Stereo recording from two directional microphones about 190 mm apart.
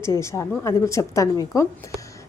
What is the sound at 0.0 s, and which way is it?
A woman's voice, 15° left (ahead or behind).